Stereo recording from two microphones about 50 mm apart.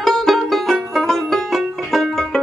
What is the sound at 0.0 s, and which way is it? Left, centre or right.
Music, centre.